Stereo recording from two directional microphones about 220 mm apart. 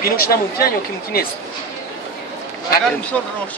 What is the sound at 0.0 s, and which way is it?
Speech, 40° left (ahead or behind).